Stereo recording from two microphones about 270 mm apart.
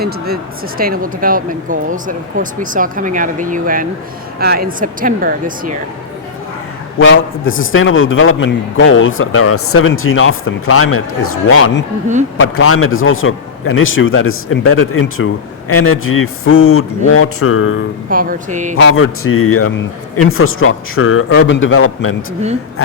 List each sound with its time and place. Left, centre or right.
0.8 s speech: right
7.0 s a man's voice: left
18.1 s speech: right
18.8 s a man's voice: left